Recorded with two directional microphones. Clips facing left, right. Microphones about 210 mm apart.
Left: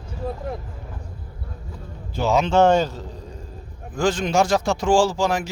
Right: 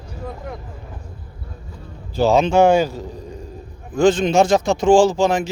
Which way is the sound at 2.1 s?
35° right (ahead or behind).